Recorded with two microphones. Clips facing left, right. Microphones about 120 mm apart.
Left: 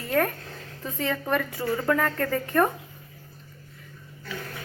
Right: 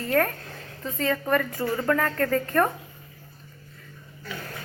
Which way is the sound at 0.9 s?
10° left (ahead or behind).